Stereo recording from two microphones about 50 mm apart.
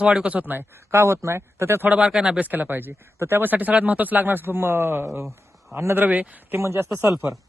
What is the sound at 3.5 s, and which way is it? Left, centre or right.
A man's voice, right.